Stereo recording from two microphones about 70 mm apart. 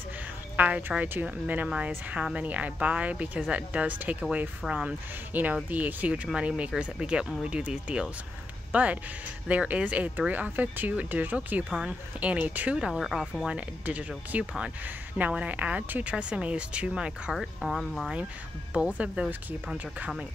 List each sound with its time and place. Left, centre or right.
0.6 s a woman's voice: right
12.7 s a woman's voice: centre
13.5 s a woman's voice: right; by 18.1 s centre
18.7 s a woman's voice: centre